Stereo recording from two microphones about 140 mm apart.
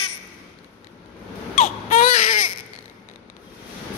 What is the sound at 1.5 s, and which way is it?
Baby cry, 65° left (ahead or behind).